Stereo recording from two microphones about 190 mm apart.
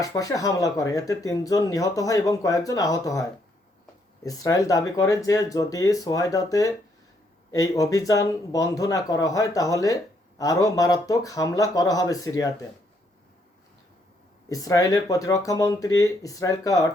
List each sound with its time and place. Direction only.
0.0 s speech: 20° left (ahead or behind)
14.5 s speech: 20° left (ahead or behind)